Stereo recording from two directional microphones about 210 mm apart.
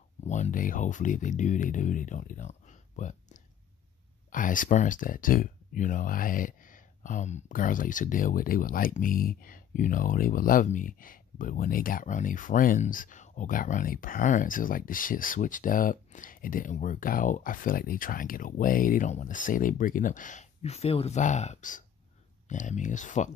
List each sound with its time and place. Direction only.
0.2 s speech: 35° left (ahead or behind)